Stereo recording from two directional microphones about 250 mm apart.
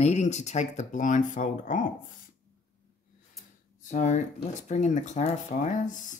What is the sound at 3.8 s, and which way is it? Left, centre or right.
Speech, left.